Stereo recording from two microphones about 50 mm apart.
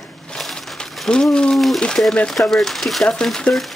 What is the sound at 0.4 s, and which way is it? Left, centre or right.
Crushing, centre.